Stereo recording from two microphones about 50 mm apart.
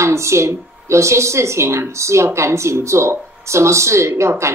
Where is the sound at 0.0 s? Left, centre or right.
Right.